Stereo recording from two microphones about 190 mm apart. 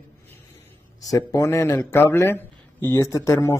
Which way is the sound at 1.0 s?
15° left (ahead or behind).